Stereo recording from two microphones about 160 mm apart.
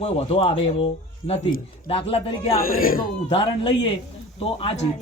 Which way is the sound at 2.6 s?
65° left (ahead or behind).